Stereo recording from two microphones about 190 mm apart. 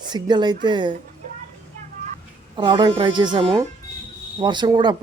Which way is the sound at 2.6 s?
25° right (ahead or behind).